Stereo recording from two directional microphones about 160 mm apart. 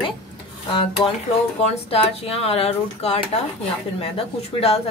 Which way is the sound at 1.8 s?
40° left (ahead or behind).